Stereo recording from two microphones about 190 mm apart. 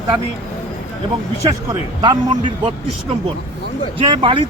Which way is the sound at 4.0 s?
25° right (ahead or behind).